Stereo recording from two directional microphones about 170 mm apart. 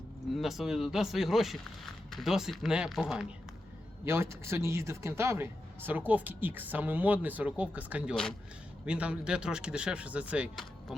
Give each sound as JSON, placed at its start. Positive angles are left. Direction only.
{"t": 0.3, "sound": "speech", "side_deg": 0}
{"t": 4.0, "sound": "speech", "side_deg": -15}
{"t": 8.1, "sound": "speech", "side_deg": 5}